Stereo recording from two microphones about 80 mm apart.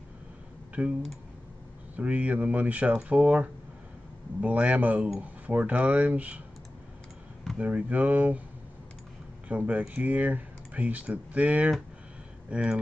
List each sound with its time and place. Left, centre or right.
0.8 s speech: centre
2.0 s speech: centre
7.5 s speech: centre
9.5 s speech: centre